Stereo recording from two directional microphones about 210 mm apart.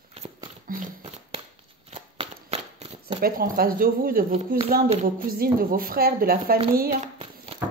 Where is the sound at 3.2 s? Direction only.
45° right (ahead or behind).